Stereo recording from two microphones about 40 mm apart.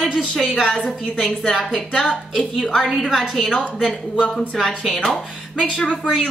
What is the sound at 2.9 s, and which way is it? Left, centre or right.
Speech, centre.